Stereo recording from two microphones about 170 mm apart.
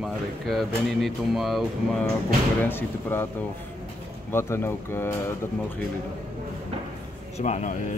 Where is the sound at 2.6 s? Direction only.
10° left (ahead or behind).